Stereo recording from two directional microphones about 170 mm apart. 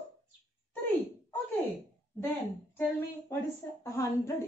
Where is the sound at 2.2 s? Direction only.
15° left (ahead or behind).